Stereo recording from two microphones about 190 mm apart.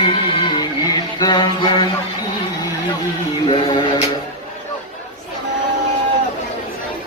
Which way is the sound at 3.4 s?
25° left (ahead or behind).